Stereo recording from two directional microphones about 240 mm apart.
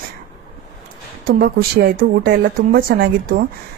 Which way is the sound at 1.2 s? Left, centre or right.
Right.